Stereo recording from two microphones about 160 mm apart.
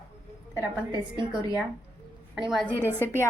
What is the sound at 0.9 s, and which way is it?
Speech, 30° right (ahead or behind).